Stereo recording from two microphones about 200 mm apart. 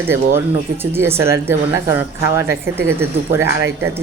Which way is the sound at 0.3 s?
10° right (ahead or behind).